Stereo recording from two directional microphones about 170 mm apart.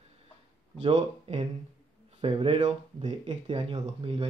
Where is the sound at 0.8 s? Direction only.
40° right (ahead or behind).